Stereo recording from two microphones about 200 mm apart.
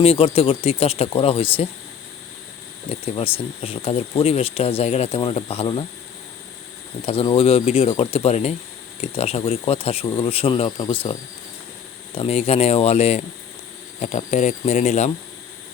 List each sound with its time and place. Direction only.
0.0 s speech: 30° left (ahead or behind)
3.2 s speech: 30° left (ahead or behind)
7.0 s speech: 30° left (ahead or behind)